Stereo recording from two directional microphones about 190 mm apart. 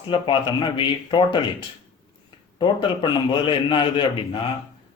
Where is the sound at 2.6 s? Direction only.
25° left (ahead or behind).